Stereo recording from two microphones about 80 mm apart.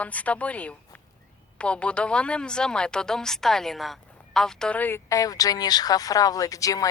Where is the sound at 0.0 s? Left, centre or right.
Centre.